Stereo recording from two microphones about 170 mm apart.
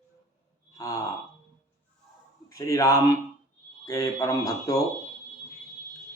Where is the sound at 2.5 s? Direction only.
20° left (ahead or behind).